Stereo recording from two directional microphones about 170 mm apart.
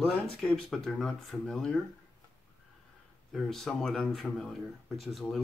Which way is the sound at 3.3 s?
Centre (ahead or behind).